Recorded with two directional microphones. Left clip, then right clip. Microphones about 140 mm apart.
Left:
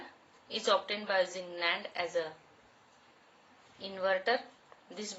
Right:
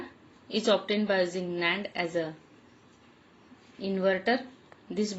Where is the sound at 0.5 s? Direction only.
30° right (ahead or behind).